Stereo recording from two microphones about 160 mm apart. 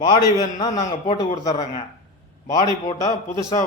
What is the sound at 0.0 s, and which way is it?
A man's voice, 25° left (ahead or behind).